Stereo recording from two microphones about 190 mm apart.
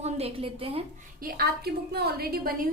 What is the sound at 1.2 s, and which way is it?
A woman's voice, 50° right (ahead or behind).